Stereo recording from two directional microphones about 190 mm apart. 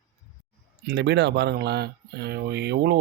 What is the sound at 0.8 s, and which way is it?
Speech, 65° right (ahead or behind).